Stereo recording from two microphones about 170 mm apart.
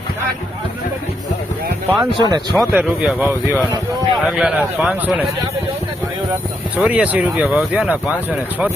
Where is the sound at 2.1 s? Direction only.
25° right (ahead or behind).